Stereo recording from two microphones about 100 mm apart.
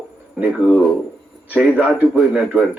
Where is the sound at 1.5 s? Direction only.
10° right (ahead or behind).